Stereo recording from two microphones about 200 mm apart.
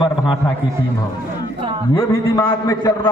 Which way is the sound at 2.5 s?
20° left (ahead or behind).